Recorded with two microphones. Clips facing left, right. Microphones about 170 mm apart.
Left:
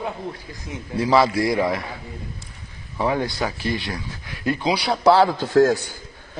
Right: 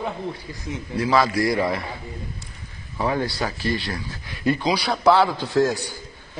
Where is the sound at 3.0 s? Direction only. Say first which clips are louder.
Left 1 dB; 15° left (ahead or behind).